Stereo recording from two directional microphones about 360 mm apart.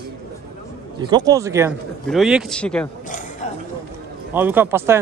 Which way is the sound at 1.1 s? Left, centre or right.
Centre.